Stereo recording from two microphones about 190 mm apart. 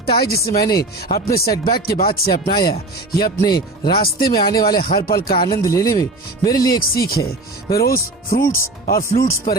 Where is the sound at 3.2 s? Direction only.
20° left (ahead or behind).